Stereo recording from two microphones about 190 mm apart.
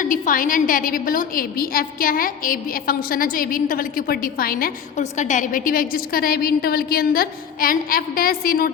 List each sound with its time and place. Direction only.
0.0 s a woman's voice: 45° left (ahead or behind)